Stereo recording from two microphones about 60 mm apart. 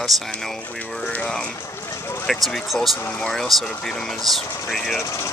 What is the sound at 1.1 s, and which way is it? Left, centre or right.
Speech, centre.